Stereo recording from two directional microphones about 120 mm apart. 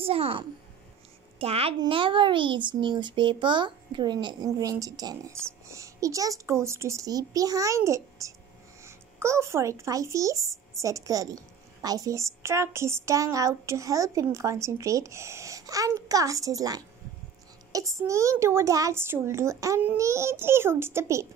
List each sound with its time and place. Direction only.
0.0 s a woman's voice: 55° right (ahead or behind)
1.8 s a child's voice: 45° right (ahead or behind); by 21.3 s 25° right (ahead or behind)